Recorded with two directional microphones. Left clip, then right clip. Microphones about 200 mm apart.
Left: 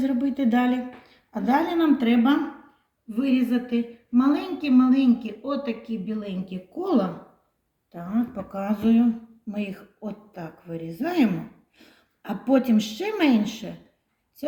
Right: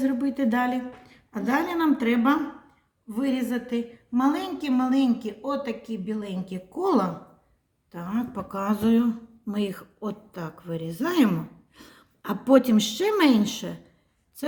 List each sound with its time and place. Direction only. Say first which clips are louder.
0.0 s a woman's voice: left 1 dB; 45° right (ahead or behind); by 13.7 s 60° right (ahead or behind)